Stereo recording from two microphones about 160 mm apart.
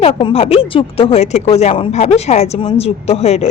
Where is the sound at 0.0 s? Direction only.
35° left (ahead or behind).